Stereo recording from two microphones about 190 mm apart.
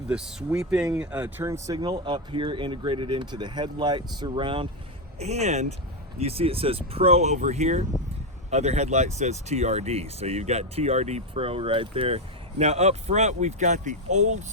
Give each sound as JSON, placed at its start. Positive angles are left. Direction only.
{"t": 0.1, "sound": "speech", "side_deg": -5}